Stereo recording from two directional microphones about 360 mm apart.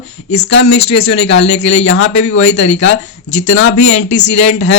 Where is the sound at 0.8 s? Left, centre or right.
Centre.